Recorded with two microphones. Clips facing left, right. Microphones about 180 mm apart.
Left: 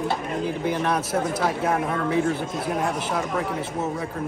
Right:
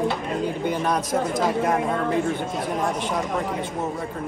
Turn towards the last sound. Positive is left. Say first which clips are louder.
# even
turn(degrees=0)  # may be behind; listen again after turning